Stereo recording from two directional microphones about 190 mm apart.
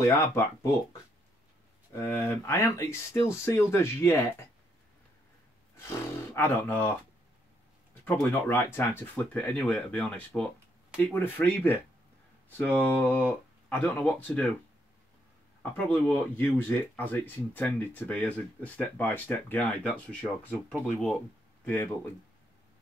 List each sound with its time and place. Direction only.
0.2 s speech: 15° left (ahead or behind)
2.0 s speech: 10° left (ahead or behind)
6.3 s speech: 10° left (ahead or behind)
8.0 s speech: 10° left (ahead or behind)
12.8 s speech: 10° left (ahead or behind)
15.9 s speech: 10° left (ahead or behind)